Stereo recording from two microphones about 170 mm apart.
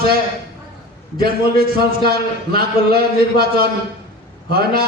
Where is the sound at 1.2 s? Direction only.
65° right (ahead or behind).